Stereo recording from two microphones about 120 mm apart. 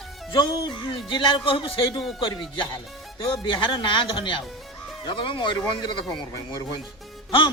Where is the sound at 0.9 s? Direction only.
45° left (ahead or behind).